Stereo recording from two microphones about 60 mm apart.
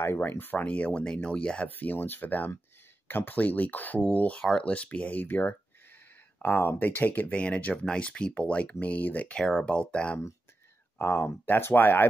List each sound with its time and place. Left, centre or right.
0.0 s speech: left; by 1.7 s centre
1.7 s speech: left
9.4 s speech: centre
9.7 s speech: centre
11.0 s speech: left